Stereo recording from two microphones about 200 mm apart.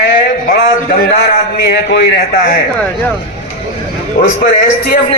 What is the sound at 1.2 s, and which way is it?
A man's voice, 55° left (ahead or behind).